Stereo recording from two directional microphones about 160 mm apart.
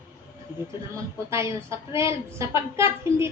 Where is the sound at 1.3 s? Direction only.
15° right (ahead or behind).